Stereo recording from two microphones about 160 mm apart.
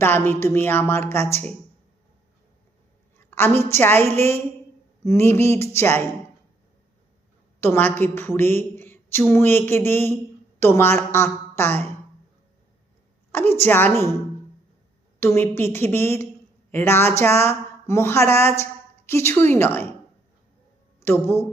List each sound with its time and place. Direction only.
0.0 s a woman's voice: 15° left (ahead or behind)
3.2 s a woman's voice: 15° left (ahead or behind)
7.6 s a woman's voice: 15° left (ahead or behind)
13.3 s a woman's voice: 15° left (ahead or behind)
15.2 s a woman's voice: 15° left (ahead or behind)
21.0 s speech: 15° left (ahead or behind)